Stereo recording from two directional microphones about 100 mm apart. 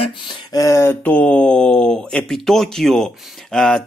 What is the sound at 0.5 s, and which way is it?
Speech, 30° left (ahead or behind).